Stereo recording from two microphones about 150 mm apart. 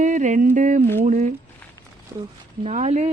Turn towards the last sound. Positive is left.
turn(degrees=-50)  # may be behind; listen again after turning